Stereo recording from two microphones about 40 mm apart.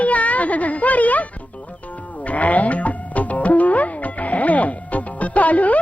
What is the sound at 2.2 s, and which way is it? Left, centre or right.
Music, left.